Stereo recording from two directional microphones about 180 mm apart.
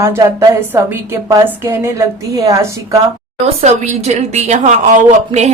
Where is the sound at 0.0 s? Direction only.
15° right (ahead or behind).